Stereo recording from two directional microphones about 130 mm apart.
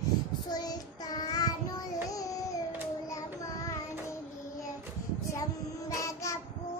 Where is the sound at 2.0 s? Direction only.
25° left (ahead or behind).